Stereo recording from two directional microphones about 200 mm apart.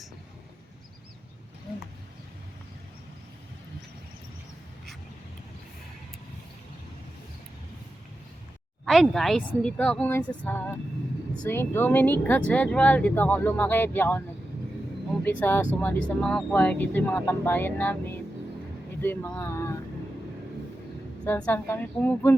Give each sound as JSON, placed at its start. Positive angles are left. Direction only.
{"t": 8.8, "sound": "speech", "side_deg": 0}
{"t": 21.2, "sound": "speech", "side_deg": 5}